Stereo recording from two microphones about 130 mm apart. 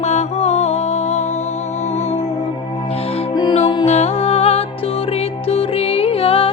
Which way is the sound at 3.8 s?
55° left (ahead or behind).